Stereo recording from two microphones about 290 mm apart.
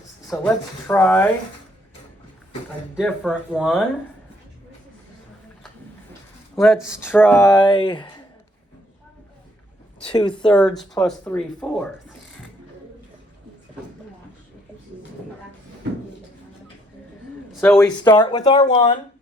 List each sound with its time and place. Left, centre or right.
0.3 s speech: centre
2.9 s speech: centre
6.6 s speech: centre
10.0 s speech: centre
10.4 s speech: centre
17.5 s a man's voice: centre
18.1 s speech: centre